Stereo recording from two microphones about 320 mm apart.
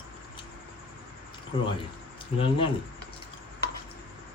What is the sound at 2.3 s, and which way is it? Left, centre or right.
Speech, centre.